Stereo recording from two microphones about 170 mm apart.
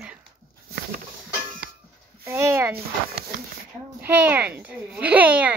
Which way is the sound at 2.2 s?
15° right (ahead or behind).